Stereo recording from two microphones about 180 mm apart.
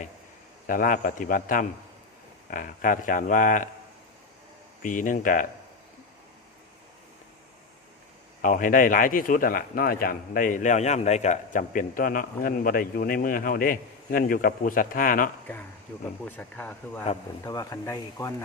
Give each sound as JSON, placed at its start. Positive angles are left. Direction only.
{"t": 0.7, "sound": "speech", "side_deg": 50}
{"t": 4.8, "sound": "speech", "side_deg": 45}
{"t": 8.4, "sound": "speech", "side_deg": 50}
{"t": 16.2, "sound": "speech", "side_deg": 10}
{"t": 17.4, "sound": "speech", "side_deg": 20}